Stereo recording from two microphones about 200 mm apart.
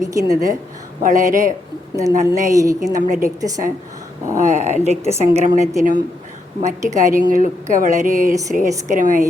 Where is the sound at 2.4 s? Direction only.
15° right (ahead or behind).